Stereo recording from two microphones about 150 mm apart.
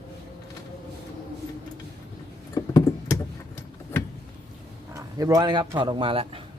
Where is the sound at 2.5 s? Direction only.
25° left (ahead or behind).